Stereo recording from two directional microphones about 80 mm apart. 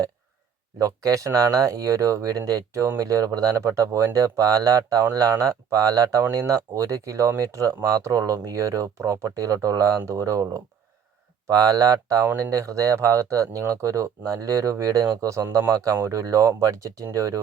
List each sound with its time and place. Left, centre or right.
0.8 s speech: right
15.4 s speech: right
16.0 s speech: right